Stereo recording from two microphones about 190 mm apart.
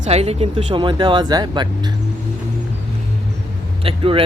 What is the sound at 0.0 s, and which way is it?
Speech, 35° right (ahead or behind).